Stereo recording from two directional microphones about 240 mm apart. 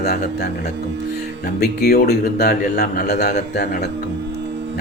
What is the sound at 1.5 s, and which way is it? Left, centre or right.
A man's voice, left.